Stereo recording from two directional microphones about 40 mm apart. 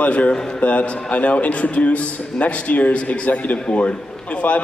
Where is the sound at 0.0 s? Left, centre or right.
Left.